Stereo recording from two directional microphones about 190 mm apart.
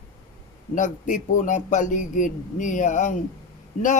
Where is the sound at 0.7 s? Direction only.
40° left (ahead or behind).